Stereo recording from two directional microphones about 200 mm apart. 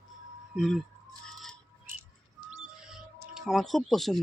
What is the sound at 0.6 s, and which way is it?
Speech, centre (ahead or behind).